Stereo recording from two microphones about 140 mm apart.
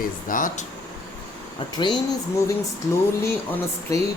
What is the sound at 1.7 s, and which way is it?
Speech, 30° left (ahead or behind).